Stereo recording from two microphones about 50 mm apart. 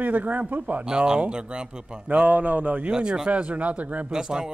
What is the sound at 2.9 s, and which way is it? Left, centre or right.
Speech, centre.